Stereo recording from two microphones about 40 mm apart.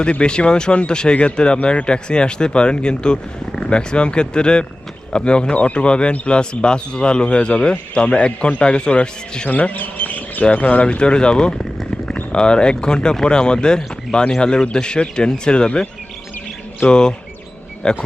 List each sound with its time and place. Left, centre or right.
0.1 s speech: left
9.5 s a sound: left
10.4 s speech: left
16.9 s speech: centre